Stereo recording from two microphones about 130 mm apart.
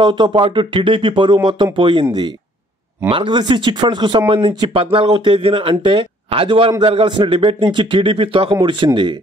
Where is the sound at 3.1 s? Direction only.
40° right (ahead or behind).